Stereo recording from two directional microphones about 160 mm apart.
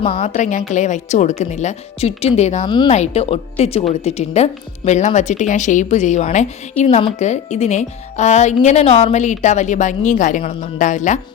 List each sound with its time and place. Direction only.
0.0 s speech: 35° left (ahead or behind)
0.3 s a woman's voice: 50° left (ahead or behind)
2.6 s a woman's voice: 30° left (ahead or behind)
2.9 s a woman's voice: 45° left (ahead or behind)
6.8 s speech: 30° left (ahead or behind)
7.2 s a woman's voice: 45° left (ahead or behind)